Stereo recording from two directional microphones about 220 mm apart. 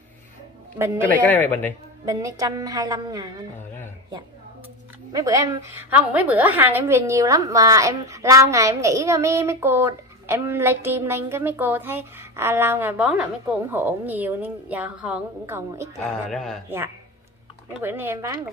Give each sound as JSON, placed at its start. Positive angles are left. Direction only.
{"t": 0.7, "sound": "a woman's voice", "side_deg": -10}
{"t": 1.4, "sound": "speech", "side_deg": 10}
{"t": 2.0, "sound": "a woman's voice", "side_deg": -15}
{"t": 5.1, "sound": "a woman's voice", "side_deg": -15}
{"t": 16.0, "sound": "a man's voice", "side_deg": 0}
{"t": 17.8, "sound": "a woman's voice", "side_deg": -10}